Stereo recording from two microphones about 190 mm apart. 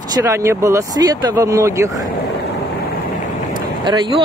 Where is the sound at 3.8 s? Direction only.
25° right (ahead or behind).